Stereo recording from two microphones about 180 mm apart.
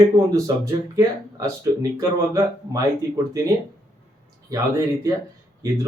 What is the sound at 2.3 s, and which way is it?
Speech, 20° right (ahead or behind).